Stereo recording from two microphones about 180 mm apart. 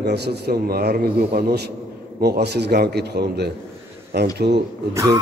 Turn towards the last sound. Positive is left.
turn(degrees=-15)  # may be behind; listen again after turning